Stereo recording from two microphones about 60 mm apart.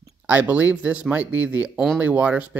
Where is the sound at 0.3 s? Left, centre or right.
Right.